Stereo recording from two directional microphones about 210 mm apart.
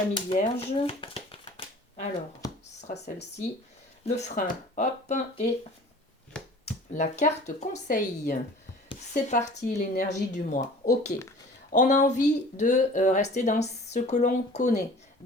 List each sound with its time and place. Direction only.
0.1 s shuffling cards: 30° left (ahead or behind)
4.0 s speech: 30° left (ahead or behind)
6.9 s speech: 35° left (ahead or behind)
11.7 s speech: 35° left (ahead or behind)